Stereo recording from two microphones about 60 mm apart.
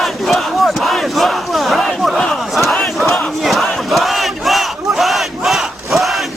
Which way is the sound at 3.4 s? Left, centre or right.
Centre.